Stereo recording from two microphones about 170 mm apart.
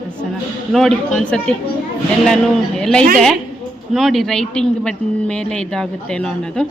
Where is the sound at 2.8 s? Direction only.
5° left (ahead or behind).